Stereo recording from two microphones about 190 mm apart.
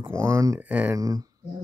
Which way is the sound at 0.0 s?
15° right (ahead or behind).